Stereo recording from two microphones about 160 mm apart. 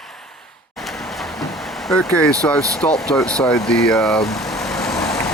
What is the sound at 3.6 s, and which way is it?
Vehicle, 5° left (ahead or behind).